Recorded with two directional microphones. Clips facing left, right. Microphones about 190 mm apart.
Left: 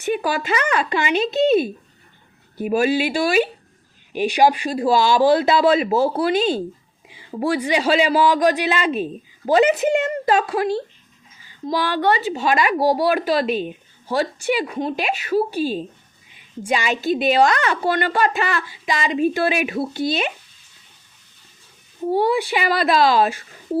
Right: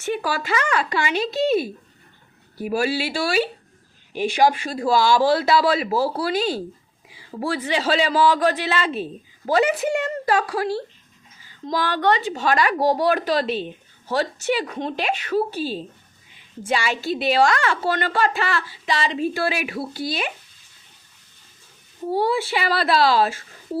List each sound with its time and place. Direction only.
0.0 s a man's voice: 15° left (ahead or behind)
22.1 s speech: 15° left (ahead or behind)